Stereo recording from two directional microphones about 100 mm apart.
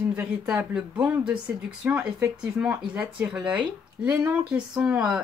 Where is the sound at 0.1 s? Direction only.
15° right (ahead or behind).